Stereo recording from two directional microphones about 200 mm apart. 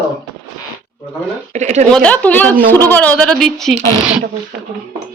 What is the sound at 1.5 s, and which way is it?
Speech, 35° right (ahead or behind).